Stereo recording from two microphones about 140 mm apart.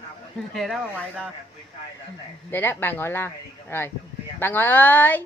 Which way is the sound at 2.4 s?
15° left (ahead or behind).